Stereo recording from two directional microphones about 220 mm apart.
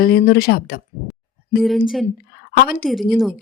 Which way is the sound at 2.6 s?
40° left (ahead or behind).